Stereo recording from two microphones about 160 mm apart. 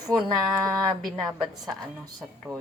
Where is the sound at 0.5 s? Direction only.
20° right (ahead or behind).